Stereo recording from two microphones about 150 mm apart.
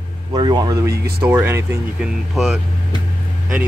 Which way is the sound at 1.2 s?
15° right (ahead or behind).